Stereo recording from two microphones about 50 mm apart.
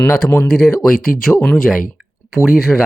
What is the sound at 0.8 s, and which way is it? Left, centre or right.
Speech, centre.